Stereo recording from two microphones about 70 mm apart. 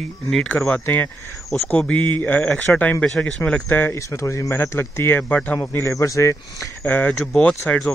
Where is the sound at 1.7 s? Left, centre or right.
Centre.